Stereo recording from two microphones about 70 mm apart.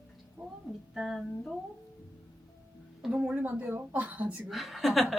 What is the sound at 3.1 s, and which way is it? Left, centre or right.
A woman's voice, centre.